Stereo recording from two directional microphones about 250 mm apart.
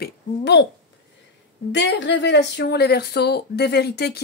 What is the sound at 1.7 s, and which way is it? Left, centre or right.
A woman's voice, left.